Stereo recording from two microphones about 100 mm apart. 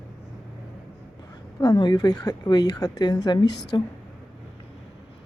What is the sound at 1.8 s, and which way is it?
A woman's voice, 45° left (ahead or behind).